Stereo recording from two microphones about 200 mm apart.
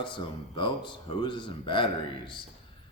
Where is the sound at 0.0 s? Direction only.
25° left (ahead or behind).